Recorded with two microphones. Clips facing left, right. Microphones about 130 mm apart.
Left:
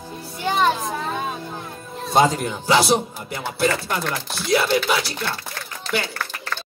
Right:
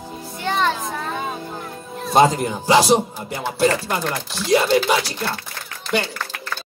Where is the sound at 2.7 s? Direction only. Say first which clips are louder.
Right 3 dB; 40° right (ahead or behind).